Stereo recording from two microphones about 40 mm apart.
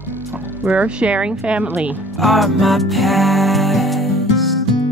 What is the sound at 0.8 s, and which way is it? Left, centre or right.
Speech, right.